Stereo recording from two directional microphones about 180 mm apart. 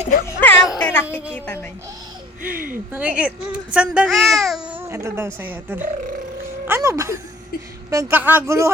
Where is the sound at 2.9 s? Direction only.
5° right (ahead or behind).